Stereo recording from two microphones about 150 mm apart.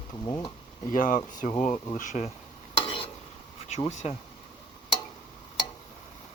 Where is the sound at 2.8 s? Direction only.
40° left (ahead or behind).